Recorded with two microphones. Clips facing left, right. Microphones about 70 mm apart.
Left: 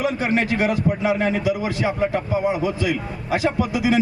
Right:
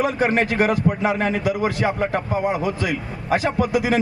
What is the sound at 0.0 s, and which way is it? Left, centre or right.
A man's voice, right.